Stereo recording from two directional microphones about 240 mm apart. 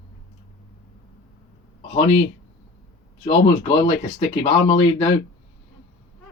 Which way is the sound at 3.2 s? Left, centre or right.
Left.